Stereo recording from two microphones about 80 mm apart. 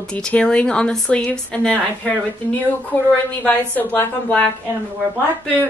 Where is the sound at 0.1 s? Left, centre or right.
Centre.